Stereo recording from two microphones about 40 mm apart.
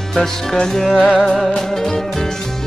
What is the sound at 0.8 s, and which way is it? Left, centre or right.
Music, centre.